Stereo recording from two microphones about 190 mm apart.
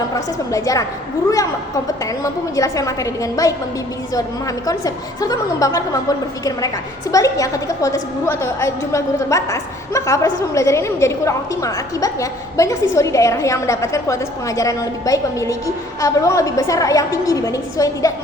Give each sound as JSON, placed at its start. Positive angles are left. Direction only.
{"t": 0.5, "sound": "a woman's voice", "side_deg": 15}
{"t": 2.2, "sound": "a woman's voice", "side_deg": 15}
{"t": 4.6, "sound": "a woman's voice", "side_deg": 20}